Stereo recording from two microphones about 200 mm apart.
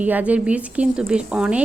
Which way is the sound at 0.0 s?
5° right (ahead or behind).